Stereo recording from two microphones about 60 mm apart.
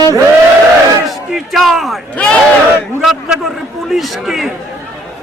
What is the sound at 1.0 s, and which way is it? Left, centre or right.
Speech, centre.